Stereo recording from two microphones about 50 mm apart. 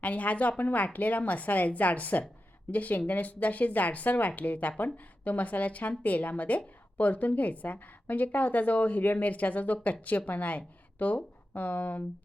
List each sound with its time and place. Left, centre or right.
0.0 s a woman's voice: left